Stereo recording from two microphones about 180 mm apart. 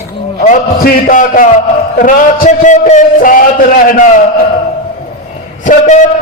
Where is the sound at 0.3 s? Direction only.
45° left (ahead or behind).